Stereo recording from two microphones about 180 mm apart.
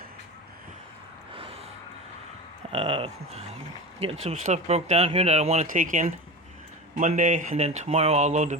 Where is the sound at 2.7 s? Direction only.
30° right (ahead or behind).